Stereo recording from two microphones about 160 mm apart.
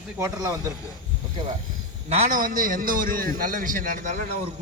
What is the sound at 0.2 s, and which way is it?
Speech, 20° right (ahead or behind).